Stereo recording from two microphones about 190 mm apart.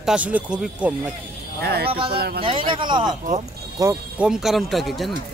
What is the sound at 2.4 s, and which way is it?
A man's voice, 25° right (ahead or behind).